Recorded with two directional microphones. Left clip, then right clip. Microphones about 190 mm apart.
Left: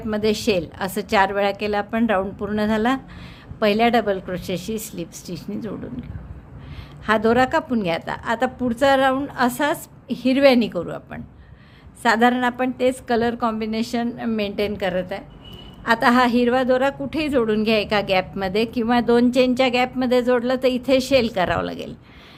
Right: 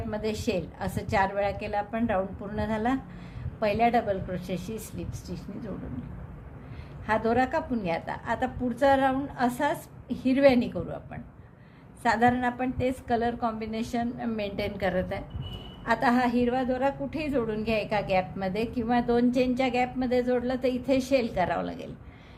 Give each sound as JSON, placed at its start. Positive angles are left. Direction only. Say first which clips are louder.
{"t": 0.1, "sound": "a woman's voice", "louder": "left 10 dB", "side_deg": 35}
{"t": 7.0, "sound": "a woman's voice", "louder": "left 8 dB", "side_deg": 35}